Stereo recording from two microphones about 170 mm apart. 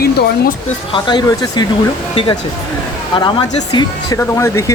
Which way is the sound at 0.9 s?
25° left (ahead or behind).